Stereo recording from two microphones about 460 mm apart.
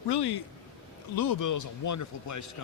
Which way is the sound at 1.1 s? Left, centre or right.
Left.